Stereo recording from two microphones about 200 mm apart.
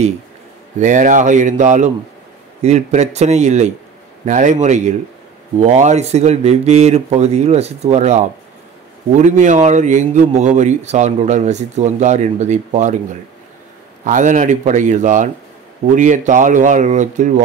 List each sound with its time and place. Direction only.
0.7 s a man's voice: 40° right (ahead or behind)
14.0 s a man's voice: 40° right (ahead or behind)